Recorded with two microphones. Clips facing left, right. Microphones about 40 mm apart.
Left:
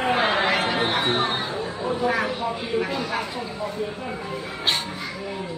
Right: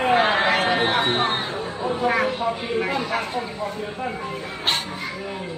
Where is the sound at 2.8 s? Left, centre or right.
Right.